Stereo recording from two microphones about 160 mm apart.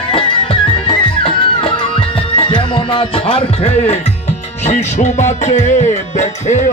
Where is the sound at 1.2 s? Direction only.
35° left (ahead or behind).